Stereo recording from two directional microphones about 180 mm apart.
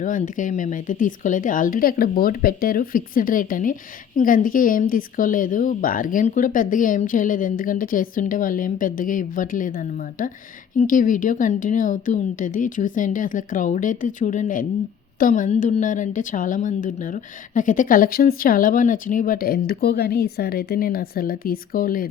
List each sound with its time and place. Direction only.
0.0 s speech: 45° left (ahead or behind)
10.8 s speech: 45° left (ahead or behind)